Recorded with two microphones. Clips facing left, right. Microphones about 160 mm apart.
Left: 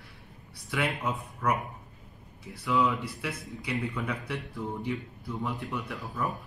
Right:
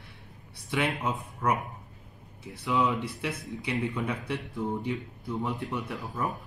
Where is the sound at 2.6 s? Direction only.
20° right (ahead or behind).